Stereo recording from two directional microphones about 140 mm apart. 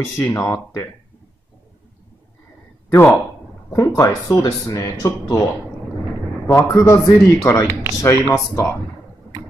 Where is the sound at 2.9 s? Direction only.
15° left (ahead or behind).